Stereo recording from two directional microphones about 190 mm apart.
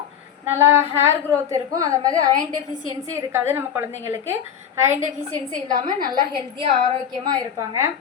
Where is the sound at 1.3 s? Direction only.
15° right (ahead or behind).